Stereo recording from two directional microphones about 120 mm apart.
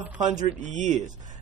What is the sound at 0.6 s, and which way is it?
Mantra, 85° right.